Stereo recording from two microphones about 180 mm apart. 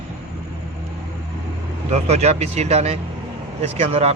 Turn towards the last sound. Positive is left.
turn(degrees=-35)  # may be behind; listen again after turning